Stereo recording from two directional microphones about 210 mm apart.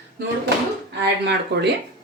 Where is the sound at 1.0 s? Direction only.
55° right (ahead or behind).